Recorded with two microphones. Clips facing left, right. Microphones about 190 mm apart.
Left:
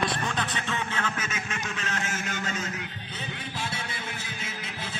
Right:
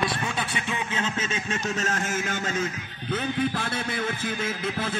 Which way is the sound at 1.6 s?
45° right (ahead or behind).